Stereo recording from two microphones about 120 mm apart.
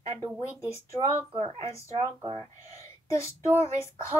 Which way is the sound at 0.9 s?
50° right (ahead or behind).